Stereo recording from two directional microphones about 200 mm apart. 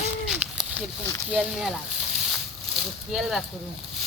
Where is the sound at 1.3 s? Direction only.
Centre (ahead or behind).